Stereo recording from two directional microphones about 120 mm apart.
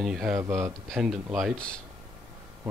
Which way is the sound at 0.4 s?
20° right (ahead or behind).